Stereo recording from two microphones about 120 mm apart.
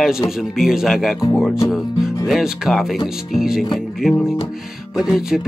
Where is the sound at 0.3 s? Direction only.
5° right (ahead or behind).